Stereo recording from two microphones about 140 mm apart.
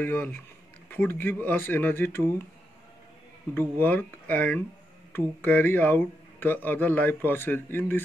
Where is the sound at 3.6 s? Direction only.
15° left (ahead or behind).